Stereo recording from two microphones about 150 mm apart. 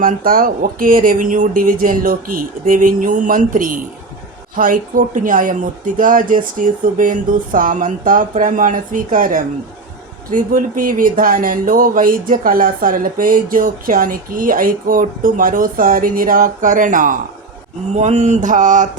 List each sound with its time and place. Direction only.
0.0 s speech: 70° right (ahead or behind)
17.9 s speech: 50° right (ahead or behind)